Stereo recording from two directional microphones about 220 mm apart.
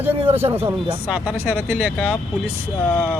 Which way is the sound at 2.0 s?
5° left (ahead or behind).